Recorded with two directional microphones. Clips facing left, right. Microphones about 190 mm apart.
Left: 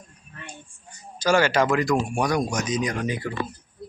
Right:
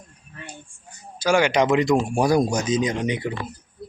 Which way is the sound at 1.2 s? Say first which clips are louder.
Right 1 dB; 15° right (ahead or behind).